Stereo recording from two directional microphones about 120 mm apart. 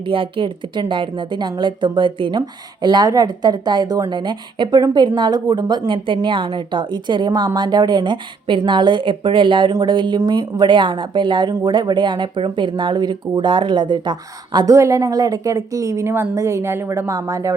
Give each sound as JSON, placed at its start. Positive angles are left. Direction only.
{"t": 0.0, "sound": "a woman's voice", "side_deg": -45}